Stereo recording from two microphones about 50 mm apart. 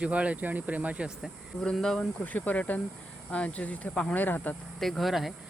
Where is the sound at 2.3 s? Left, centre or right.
Left.